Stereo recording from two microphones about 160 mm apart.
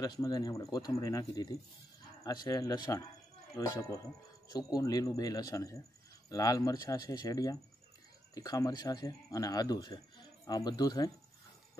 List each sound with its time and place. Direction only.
0.0 s speech: 25° left (ahead or behind)